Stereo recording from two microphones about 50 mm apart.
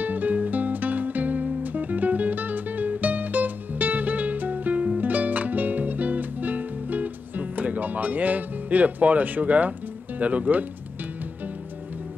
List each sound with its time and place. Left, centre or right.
0.0 s music: right